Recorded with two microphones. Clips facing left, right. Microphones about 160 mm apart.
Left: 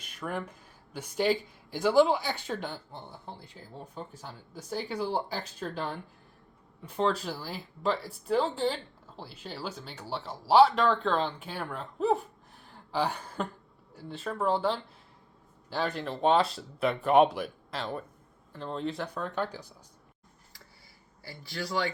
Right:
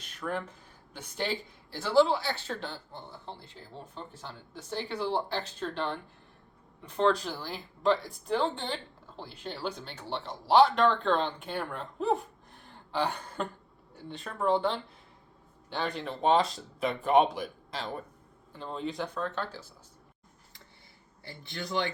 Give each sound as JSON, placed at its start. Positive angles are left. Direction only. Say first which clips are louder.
{"t": 0.0, "sound": "speech", "louder": "right 1 dB", "side_deg": 10}
{"t": 12.6, "sound": "a sound", "louder": "left 1 dB", "side_deg": 5}
{"t": 13.9, "sound": "speech", "louder": "left 4 dB", "side_deg": 5}
{"t": 19.2, "sound": "speech", "louder": "left 2 dB", "side_deg": 15}
{"t": 21.2, "sound": "speech", "louder": "left 2 dB", "side_deg": -25}